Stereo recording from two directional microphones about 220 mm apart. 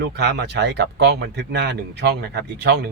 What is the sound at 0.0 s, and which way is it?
Speech, 50° right (ahead or behind).